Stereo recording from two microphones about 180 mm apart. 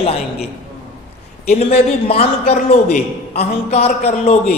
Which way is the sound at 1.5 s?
35° left (ahead or behind).